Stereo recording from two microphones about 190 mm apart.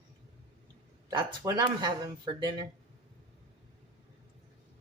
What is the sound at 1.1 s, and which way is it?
Speech, 25° right (ahead or behind).